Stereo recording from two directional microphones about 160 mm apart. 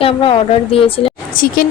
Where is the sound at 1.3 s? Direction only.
60° left (ahead or behind).